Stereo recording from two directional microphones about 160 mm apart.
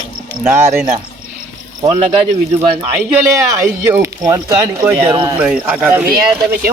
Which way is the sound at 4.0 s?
20° right (ahead or behind).